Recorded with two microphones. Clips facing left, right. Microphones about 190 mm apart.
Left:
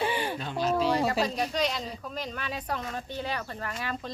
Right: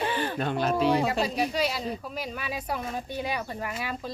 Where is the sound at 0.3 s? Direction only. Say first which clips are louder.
Right 3 dB; 60° right (ahead or behind).